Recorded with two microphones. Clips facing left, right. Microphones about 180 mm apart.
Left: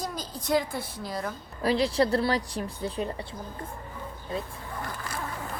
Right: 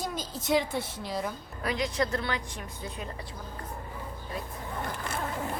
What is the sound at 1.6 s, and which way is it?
A woman's voice, 30° left (ahead or behind).